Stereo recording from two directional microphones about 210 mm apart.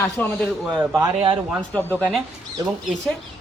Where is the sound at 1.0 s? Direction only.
25° right (ahead or behind).